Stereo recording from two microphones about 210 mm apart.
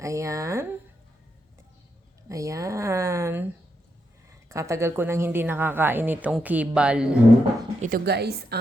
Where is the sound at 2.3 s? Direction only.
15° right (ahead or behind).